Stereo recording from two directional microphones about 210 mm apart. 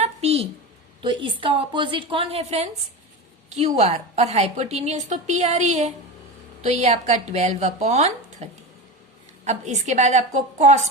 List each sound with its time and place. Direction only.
0.0 s a sound: 30° right (ahead or behind)
1.0 s a woman's voice: 25° right (ahead or behind)
3.8 s a woman's voice: 30° right (ahead or behind)